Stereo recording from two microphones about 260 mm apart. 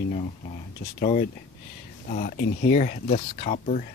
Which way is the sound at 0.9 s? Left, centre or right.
Left.